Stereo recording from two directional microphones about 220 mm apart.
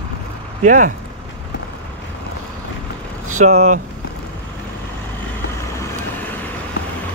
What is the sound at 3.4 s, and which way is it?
Speech, 30° right (ahead or behind).